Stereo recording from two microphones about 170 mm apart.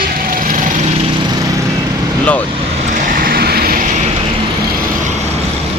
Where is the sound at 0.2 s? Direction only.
55° right (ahead or behind).